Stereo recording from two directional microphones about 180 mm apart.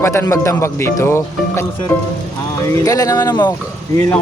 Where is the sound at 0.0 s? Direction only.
15° left (ahead or behind).